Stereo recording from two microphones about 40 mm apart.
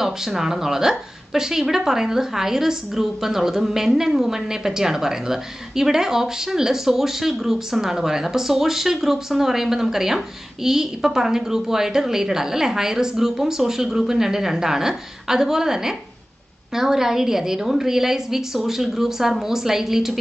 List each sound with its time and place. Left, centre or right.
0.0 s speech: centre